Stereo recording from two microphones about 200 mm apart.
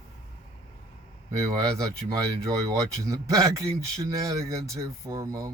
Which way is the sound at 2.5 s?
15° right (ahead or behind).